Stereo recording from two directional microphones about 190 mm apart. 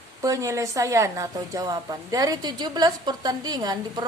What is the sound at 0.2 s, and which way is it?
A woman's voice, 15° right (ahead or behind).